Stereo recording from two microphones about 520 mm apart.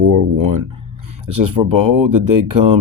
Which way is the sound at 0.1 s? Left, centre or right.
Right.